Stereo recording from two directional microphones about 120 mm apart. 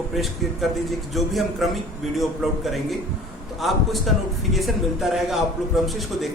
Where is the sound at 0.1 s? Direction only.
Centre (ahead or behind).